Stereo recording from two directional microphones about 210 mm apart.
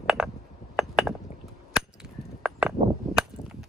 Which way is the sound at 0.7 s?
5° right (ahead or behind).